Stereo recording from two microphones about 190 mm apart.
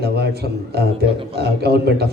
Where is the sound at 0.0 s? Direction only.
60° right (ahead or behind).